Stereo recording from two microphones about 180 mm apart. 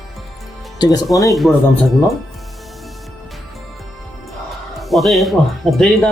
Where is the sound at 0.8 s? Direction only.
20° left (ahead or behind).